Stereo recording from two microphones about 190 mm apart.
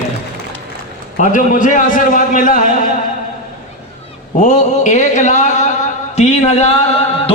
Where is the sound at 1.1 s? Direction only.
40° left (ahead or behind).